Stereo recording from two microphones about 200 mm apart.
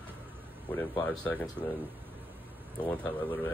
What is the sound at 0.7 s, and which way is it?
Speech, 10° left (ahead or behind).